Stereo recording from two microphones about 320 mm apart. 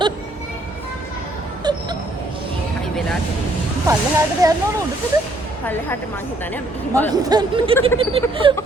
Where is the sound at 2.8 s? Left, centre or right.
Centre.